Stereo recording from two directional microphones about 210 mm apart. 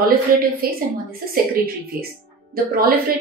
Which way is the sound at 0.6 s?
45° right (ahead or behind).